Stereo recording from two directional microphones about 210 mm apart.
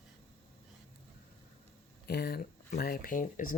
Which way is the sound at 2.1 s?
50° left (ahead or behind).